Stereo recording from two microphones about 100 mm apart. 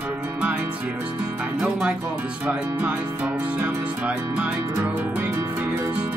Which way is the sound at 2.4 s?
20° right (ahead or behind).